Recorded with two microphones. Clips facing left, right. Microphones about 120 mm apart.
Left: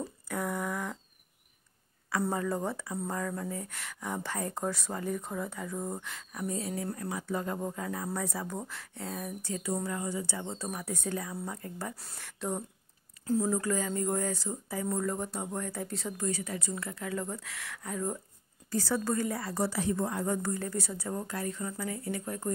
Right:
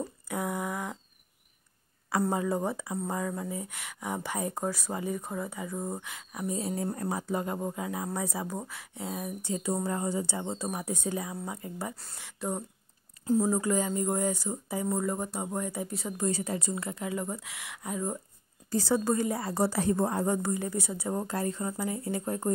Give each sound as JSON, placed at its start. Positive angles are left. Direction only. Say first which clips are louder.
{"t": 0.3, "sound": "a sound", "louder": "right 1 dB", "side_deg": -10}
{"t": 2.3, "sound": "speech", "louder": "right 3 dB", "side_deg": -15}
{"t": 6.7, "sound": "a woman's voice", "louder": "right 3 dB", "side_deg": -30}
{"t": 7.2, "sound": "speech", "louder": "right 2 dB", "side_deg": -15}
{"t": 9.8, "sound": "speech", "louder": "right 4 dB", "side_deg": -35}
{"t": 11.9, "sound": "speech", "louder": "even", "side_deg": 0}
{"t": 13.2, "sound": "speech", "louder": "right 3 dB", "side_deg": -20}
{"t": 14.9, "sound": "speech", "louder": "right 1 dB", "side_deg": -10}
{"t": 16.2, "sound": "speech", "louder": "right 6 dB", "side_deg": -30}
{"t": 16.7, "sound": "speech", "louder": "right 2 dB", "side_deg": -20}
{"t": 19.7, "sound": "a woman's voice", "louder": "right 4 dB", "side_deg": -45}
{"t": 20.4, "sound": "speech", "louder": "right 2 dB", "side_deg": -15}
{"t": 21.2, "sound": "speech", "louder": "right 4 dB", "side_deg": -30}